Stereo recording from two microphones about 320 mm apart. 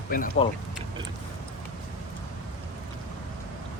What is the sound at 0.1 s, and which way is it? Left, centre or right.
Speech, left.